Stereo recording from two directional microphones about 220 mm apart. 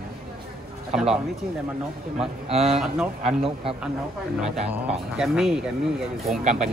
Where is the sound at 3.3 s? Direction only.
25° right (ahead or behind).